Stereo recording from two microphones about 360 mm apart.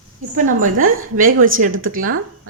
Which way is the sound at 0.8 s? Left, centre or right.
Right.